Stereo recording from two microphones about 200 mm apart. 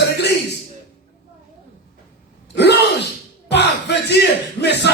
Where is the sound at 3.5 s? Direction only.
60° left (ahead or behind).